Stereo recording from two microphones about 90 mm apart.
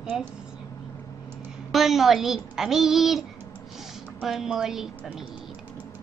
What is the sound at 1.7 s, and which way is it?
A woman's voice, centre (ahead or behind).